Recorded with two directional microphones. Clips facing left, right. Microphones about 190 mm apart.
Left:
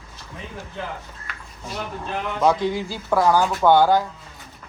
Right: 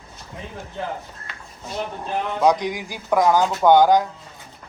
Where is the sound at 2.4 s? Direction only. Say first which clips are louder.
Even; 15° right (ahead or behind).